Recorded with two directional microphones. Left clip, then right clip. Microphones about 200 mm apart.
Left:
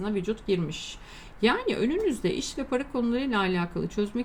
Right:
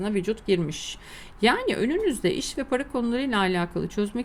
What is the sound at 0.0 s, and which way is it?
A woman's voice, 40° right (ahead or behind).